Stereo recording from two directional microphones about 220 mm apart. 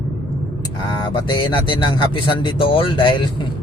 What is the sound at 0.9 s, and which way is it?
Mantra, 20° left (ahead or behind).